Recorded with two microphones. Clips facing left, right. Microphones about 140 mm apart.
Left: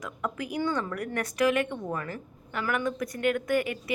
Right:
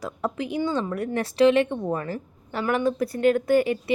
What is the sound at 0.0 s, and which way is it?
A woman's voice, 30° right (ahead or behind).